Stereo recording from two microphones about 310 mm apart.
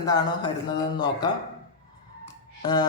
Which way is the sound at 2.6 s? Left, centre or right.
Centre.